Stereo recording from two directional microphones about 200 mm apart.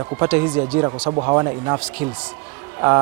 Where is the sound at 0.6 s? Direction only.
25° right (ahead or behind).